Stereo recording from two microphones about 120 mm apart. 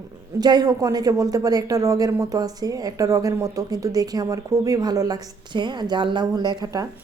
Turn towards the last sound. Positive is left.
turn(degrees=-35)  # may be behind; listen again after turning